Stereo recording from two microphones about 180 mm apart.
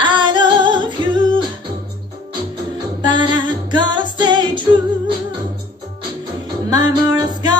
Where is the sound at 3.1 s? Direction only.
25° right (ahead or behind).